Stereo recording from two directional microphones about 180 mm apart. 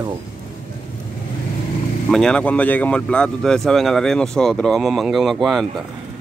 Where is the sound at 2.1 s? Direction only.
5° left (ahead or behind).